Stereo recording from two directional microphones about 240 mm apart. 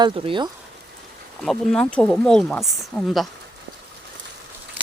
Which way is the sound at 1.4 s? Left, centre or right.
Centre.